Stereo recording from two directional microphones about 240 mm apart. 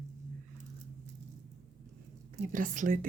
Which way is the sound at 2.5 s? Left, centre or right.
Right.